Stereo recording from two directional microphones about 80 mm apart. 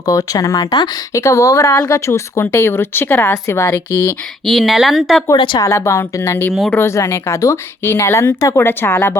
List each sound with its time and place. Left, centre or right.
0.1 s speech: left
1.1 s speech: left
4.4 s speech: centre
5.5 s speech: left
8.5 s speech: left